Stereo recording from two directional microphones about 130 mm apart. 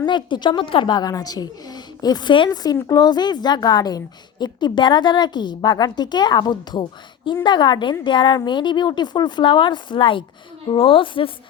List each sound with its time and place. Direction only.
0.0 s a woman's voice: 35° left (ahead or behind)